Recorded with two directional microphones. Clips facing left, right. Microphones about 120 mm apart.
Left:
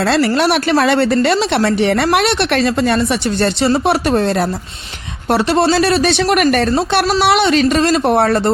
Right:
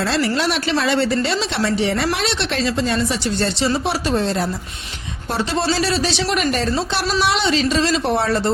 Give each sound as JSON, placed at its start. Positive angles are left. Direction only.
{"t": 0.0, "sound": "speech", "side_deg": 60}